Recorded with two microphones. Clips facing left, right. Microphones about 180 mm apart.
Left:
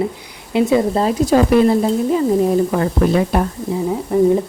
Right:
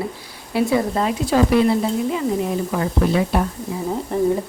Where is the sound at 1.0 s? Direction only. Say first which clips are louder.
Left 4 dB; 40° left (ahead or behind).